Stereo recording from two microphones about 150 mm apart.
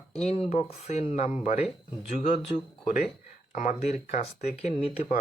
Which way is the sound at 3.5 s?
50° left (ahead or behind).